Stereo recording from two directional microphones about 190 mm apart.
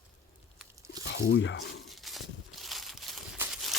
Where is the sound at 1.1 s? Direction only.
65° left (ahead or behind).